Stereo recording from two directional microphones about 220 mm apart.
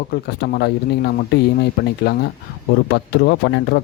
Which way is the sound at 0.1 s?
45° left (ahead or behind).